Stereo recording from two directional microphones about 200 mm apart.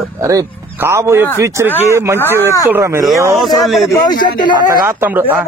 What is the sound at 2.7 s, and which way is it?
Speech, 15° right (ahead or behind).